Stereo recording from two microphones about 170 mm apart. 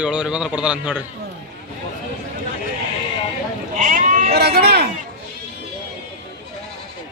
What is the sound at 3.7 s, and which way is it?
Sheep, 50° right (ahead or behind).